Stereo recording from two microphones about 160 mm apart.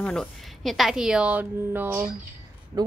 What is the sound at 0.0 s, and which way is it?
A woman's voice, 5° left (ahead or behind).